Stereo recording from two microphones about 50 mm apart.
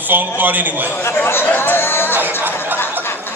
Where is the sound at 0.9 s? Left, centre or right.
Left.